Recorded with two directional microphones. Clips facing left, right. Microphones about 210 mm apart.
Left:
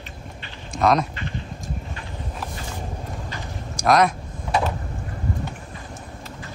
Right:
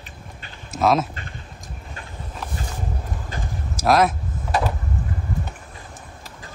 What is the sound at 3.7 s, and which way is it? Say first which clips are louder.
Vehicle: even; 5° right (ahead or behind).